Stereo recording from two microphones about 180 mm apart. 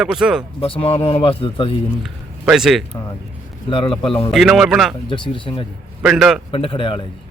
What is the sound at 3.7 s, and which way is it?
Speech, 30° left (ahead or behind).